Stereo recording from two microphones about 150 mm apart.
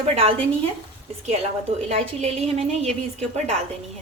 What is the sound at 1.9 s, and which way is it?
A woman's voice, 45° right (ahead or behind).